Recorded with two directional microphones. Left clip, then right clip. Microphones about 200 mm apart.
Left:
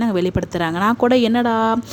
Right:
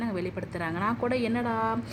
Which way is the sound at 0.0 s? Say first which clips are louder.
Left 13 dB; 45° left (ahead or behind).